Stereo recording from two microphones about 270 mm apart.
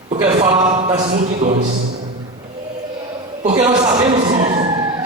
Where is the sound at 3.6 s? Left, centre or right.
Centre.